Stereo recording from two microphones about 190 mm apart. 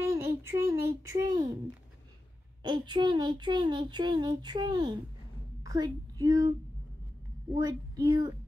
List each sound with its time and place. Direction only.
0.0 s speech: 15° right (ahead or behind)
2.6 s a child's voice: 25° right (ahead or behind)
7.5 s a child's voice: 20° right (ahead or behind)